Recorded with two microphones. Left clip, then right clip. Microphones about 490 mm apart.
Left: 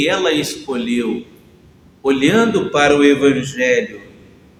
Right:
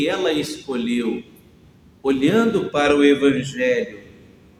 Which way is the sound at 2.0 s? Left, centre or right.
Right.